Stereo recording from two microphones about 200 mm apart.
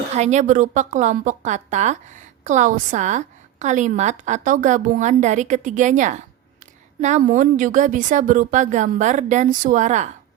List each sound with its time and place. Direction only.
0.1 s a woman's voice: 35° right (ahead or behind)